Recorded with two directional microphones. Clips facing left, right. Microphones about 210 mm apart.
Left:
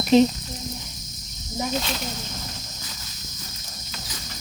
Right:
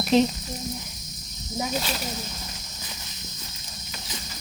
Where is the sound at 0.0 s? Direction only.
Centre (ahead or behind).